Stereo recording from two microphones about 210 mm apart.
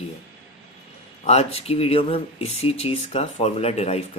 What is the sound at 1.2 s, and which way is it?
Speech, 30° left (ahead or behind).